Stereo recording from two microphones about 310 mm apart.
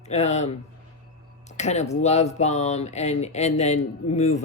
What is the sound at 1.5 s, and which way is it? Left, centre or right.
Speech, left.